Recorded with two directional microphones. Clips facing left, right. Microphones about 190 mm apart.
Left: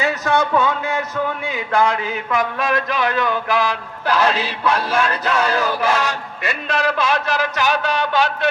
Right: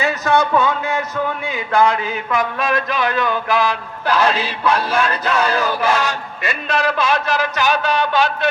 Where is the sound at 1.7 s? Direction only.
55° left (ahead or behind).